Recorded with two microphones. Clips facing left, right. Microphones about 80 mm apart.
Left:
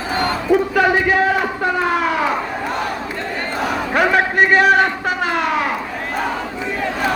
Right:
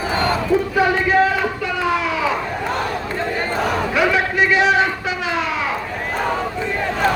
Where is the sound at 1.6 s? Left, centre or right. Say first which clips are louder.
Left 5 dB; left.